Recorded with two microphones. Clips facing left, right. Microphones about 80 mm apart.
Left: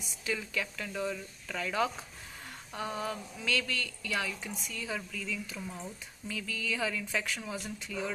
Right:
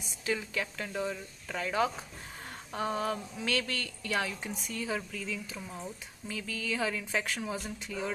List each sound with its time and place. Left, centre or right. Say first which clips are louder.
0.2 s speech: right 2 dB; right
2.8 s a woman's voice: right 4 dB; right
4.8 s speech: right 2 dB; right